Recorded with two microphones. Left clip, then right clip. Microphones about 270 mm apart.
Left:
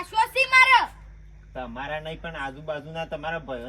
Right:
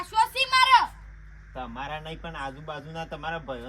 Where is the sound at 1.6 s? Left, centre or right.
Centre.